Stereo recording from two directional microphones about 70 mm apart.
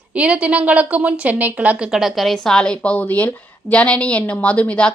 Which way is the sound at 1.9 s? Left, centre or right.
Centre.